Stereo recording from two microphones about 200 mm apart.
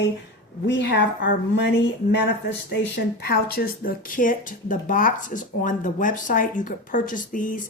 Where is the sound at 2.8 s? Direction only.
50° left (ahead or behind).